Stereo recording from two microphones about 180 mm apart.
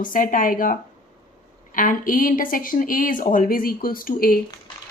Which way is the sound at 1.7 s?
50° left (ahead or behind).